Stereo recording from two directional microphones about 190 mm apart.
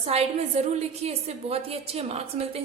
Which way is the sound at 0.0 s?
35° right (ahead or behind).